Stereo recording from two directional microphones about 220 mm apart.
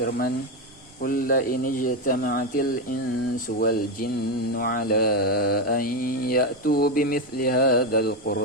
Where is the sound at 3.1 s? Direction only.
90° left.